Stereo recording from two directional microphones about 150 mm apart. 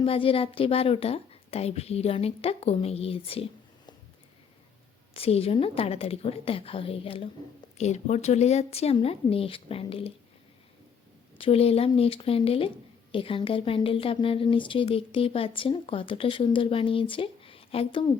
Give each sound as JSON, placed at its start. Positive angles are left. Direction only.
{"t": 0.0, "sound": "a woman's voice", "side_deg": 35}
{"t": 5.1, "sound": "a woman's voice", "side_deg": 40}
{"t": 7.8, "sound": "speech", "side_deg": 50}
{"t": 11.3, "sound": "a woman's voice", "side_deg": 40}